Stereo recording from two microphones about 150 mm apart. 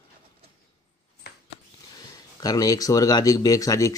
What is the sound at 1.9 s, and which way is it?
Speech, 25° left (ahead or behind).